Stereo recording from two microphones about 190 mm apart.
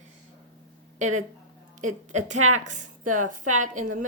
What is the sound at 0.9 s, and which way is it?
A woman's voice, 40° right (ahead or behind).